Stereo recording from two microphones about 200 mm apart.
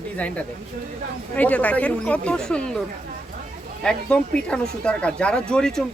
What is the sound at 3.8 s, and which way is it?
Speech, 5° left (ahead or behind).